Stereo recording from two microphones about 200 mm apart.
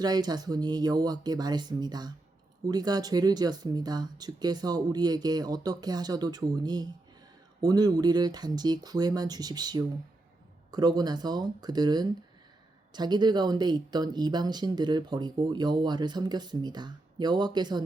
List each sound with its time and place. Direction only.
0.0 s speech: 20° right (ahead or behind)